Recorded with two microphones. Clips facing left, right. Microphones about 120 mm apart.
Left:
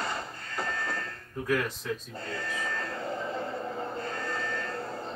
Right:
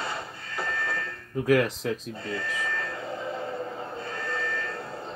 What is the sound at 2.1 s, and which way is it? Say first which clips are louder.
Sheep: right 3 dB; centre (ahead or behind).